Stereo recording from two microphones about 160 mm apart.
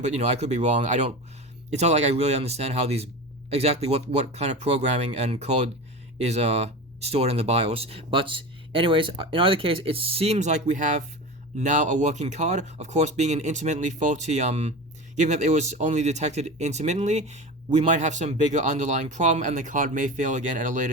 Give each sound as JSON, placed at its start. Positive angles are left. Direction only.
{"t": 0.0, "sound": "speech", "side_deg": -45}